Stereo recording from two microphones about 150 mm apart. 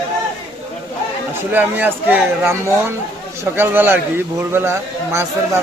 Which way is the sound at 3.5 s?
15° right (ahead or behind).